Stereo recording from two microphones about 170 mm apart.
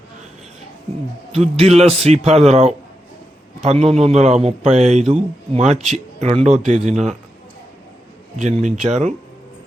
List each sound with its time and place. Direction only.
1.3 s a man's voice: 40° right (ahead or behind)
8.4 s speech: 45° right (ahead or behind)